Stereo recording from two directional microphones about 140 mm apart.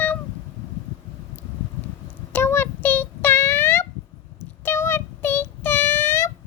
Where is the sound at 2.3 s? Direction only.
15° left (ahead or behind).